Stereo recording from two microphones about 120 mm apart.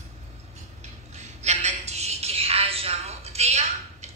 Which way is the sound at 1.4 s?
70° right (ahead or behind).